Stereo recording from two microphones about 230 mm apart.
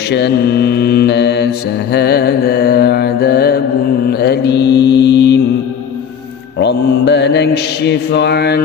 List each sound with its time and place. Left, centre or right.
0.1 s mantra: left
6.6 s mantra: left